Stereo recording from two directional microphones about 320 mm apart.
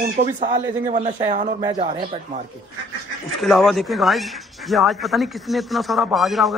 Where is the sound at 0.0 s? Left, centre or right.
Right.